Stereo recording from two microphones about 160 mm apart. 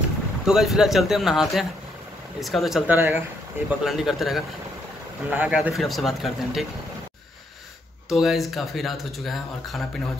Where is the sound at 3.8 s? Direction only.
Centre (ahead or behind).